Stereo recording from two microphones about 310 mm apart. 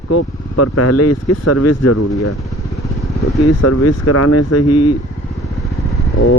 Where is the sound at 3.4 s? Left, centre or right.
Left.